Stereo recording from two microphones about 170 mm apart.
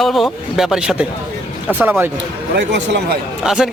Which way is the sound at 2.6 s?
90° right.